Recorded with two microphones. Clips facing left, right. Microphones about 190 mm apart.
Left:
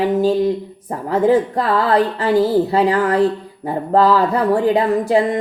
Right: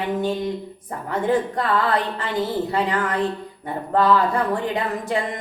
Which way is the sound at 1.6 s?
35° left (ahead or behind).